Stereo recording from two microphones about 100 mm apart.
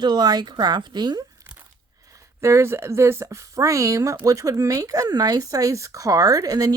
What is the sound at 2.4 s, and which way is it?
Speech, 30° right (ahead or behind).